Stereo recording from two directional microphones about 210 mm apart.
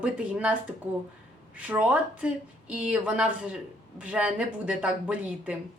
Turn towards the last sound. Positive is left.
turn(degrees=-5)  # may be behind; listen again after turning